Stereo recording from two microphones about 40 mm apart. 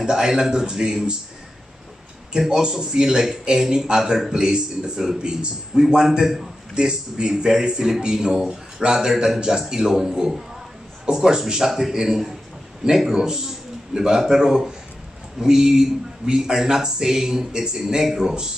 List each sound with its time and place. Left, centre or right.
0.0 s speech: centre
2.3 s speech: centre
6.7 s a man's voice: right